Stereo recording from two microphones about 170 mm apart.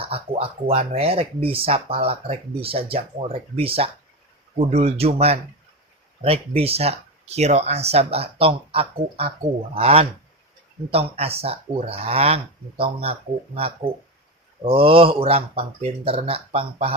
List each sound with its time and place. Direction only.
0.0 s speech: 35° right (ahead or behind)
14.6 s speech: 35° right (ahead or behind)